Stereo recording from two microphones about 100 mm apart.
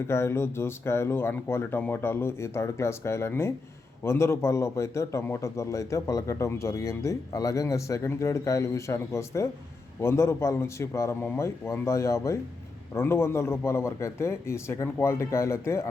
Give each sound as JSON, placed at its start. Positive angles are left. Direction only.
{"t": 0.1, "sound": "a man's voice", "side_deg": 25}